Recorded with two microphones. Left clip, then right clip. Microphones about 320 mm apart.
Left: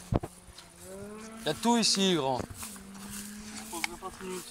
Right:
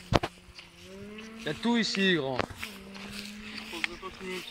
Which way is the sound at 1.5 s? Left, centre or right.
Centre.